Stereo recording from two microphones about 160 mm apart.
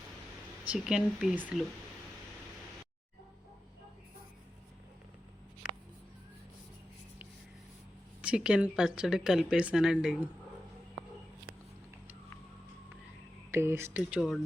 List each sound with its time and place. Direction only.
0.7 s speech: 5° right (ahead or behind)
8.2 s speech: 5° right (ahead or behind)
13.5 s speech: 15° right (ahead or behind)